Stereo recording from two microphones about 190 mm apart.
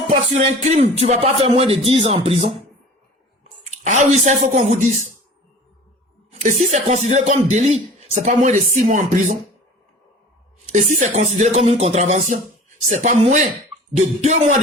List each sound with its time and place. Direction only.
0.1 s music: 35° right (ahead or behind)
1.0 s speech: 30° right (ahead or behind)
3.7 s speech: 35° right (ahead or behind)
6.4 s speech: 40° right (ahead or behind)
10.7 s speech: 40° right (ahead or behind)